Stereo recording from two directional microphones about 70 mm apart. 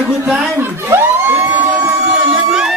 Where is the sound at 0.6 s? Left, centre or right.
Right.